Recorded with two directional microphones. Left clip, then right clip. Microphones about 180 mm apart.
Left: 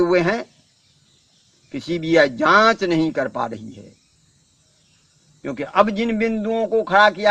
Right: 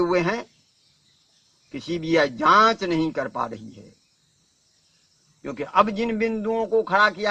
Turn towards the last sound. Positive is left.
turn(degrees=-40)  # may be behind; listen again after turning